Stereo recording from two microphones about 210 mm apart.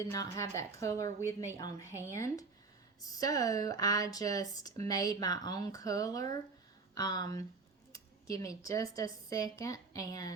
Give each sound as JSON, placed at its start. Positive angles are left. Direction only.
{"t": 0.0, "sound": "a woman's voice", "side_deg": 15}